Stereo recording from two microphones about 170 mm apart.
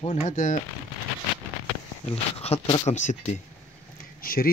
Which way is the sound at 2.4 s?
35° left (ahead or behind).